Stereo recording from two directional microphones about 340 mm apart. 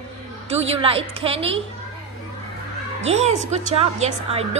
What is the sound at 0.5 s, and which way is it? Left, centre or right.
A woman's voice, centre.